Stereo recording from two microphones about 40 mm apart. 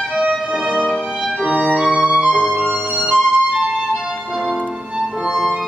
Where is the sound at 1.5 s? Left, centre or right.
Right.